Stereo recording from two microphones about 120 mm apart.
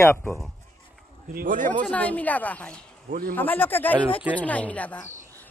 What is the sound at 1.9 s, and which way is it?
A man's voice, 10° left (ahead or behind).